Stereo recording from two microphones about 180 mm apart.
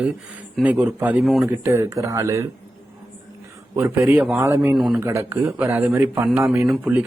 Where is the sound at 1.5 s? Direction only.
15° right (ahead or behind).